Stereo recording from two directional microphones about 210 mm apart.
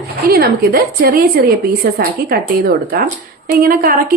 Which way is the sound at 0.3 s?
45° right (ahead or behind).